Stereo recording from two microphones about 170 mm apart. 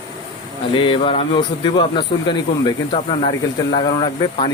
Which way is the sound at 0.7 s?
30° left (ahead or behind).